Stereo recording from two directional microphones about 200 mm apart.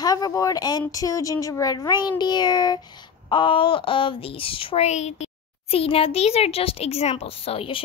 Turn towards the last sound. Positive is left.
turn(degrees=30)  # may be behind; listen again after turning